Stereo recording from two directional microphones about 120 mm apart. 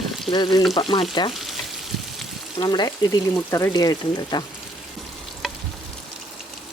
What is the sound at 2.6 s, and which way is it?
Speech, 40° left (ahead or behind).